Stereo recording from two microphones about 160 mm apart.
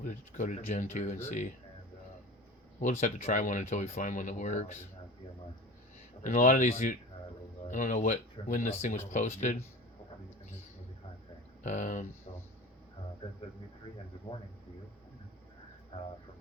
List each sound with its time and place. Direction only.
0.0 s speech: 55° left (ahead or behind)
2.8 s speech: 50° left (ahead or behind)
6.2 s speech: 55° left (ahead or behind)
11.6 s speech: 50° left (ahead or behind)
12.3 s a sound: 40° left (ahead or behind)